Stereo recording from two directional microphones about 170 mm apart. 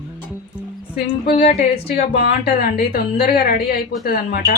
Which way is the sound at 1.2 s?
50° left (ahead or behind).